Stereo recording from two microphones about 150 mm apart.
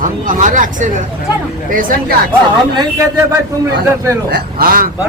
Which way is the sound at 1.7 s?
70° right (ahead or behind).